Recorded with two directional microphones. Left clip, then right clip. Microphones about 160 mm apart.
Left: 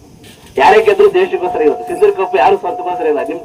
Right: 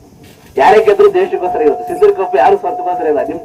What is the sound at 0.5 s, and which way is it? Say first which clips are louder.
Speech: right 1 dB; 40° right (ahead or behind).